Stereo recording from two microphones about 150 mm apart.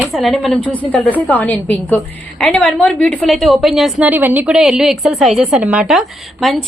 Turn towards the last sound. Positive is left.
turn(degrees=0)  # may be behind; listen again after turning